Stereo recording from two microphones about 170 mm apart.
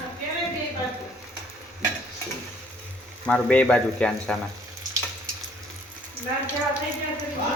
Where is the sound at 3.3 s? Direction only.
5° left (ahead or behind).